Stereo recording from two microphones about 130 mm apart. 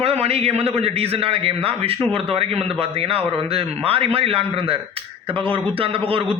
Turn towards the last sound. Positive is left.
turn(degrees=-45)  # may be behind; listen again after turning